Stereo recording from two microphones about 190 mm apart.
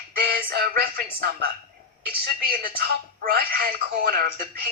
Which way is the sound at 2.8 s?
55° right (ahead or behind).